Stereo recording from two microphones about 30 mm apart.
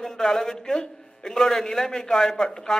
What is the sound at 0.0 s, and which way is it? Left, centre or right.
A man's voice, centre.